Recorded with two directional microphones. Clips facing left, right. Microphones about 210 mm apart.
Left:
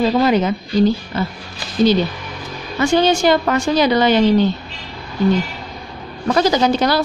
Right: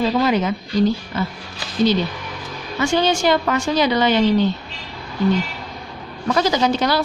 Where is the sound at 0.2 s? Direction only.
35° left (ahead or behind).